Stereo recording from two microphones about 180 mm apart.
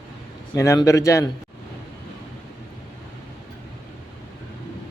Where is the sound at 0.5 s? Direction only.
15° left (ahead or behind).